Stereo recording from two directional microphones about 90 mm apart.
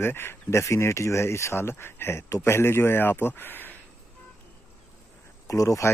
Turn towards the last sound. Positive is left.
turn(degrees=35)  # may be behind; listen again after turning